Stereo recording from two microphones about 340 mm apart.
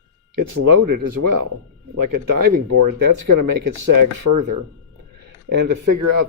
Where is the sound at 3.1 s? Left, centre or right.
Right.